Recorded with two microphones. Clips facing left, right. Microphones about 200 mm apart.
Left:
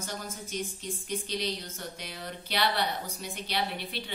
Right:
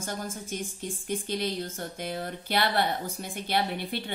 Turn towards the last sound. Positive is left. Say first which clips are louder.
# right 4 dB
turn(degrees=-55)  # may be behind; listen again after turning